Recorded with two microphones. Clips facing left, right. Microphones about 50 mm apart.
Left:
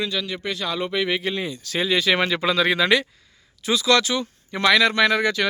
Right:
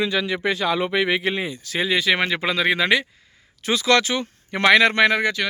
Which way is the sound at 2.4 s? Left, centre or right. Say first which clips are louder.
Left 1 dB; right.